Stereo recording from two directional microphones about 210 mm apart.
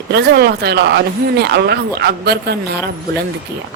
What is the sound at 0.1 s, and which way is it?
Speech, 50° right (ahead or behind).